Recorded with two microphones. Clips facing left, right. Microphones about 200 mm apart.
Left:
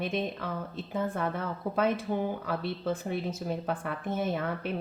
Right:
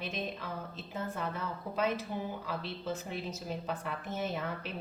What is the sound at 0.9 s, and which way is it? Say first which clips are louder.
Speech: left 6 dB; 55° left (ahead or behind).